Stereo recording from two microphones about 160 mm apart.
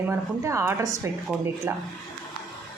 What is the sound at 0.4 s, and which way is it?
Speech, 15° right (ahead or behind).